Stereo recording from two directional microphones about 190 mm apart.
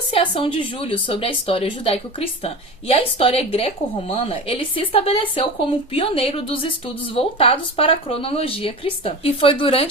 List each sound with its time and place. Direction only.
0.1 s a woman's voice: 30° left (ahead or behind)